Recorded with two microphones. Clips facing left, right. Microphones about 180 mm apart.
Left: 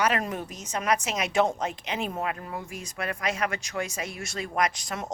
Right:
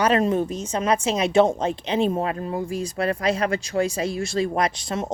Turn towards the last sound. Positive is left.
turn(degrees=-30)  # may be behind; listen again after turning